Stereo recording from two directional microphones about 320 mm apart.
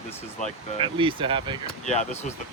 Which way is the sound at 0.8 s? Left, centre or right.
Centre.